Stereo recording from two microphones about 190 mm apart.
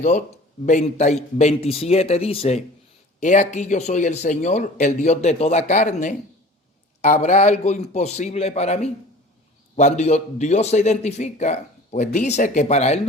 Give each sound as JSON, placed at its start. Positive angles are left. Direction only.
{"t": 0.6, "sound": "a man's voice", "side_deg": 40}